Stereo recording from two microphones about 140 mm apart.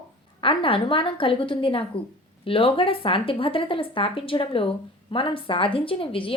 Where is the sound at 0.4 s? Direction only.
40° left (ahead or behind).